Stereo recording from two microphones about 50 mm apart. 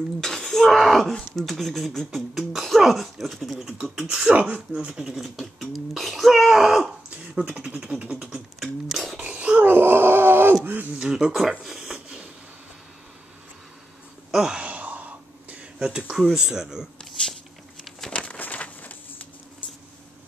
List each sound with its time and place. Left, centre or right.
0.2 s speech: centre
4.3 s speech: right
4.7 s speech: centre
5.1 s speech: centre
7.1 s speech: centre
9.2 s wail: right
9.7 s wail: right
11.0 s speech: centre
11.6 s a sound: centre
14.3 s a sound: centre
14.6 s throat clearing: right
15.8 s speech: centre
18.1 s a sound: left
18.4 s a sound: left